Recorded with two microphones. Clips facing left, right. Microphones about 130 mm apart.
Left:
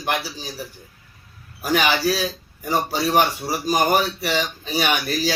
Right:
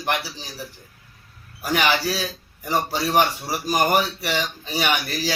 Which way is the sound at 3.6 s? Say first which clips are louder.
Left 1 dB; 20° left (ahead or behind).